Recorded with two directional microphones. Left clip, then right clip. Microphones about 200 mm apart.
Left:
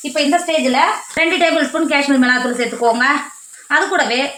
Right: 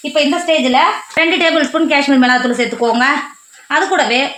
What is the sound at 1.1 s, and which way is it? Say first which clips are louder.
Speech: right 3 dB; 45° right (ahead or behind).